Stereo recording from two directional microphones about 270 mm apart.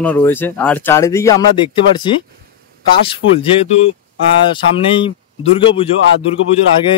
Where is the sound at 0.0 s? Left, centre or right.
Centre.